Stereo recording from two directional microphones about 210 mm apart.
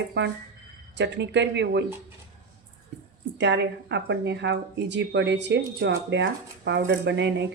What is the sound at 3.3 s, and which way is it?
Speech, 55° right (ahead or behind).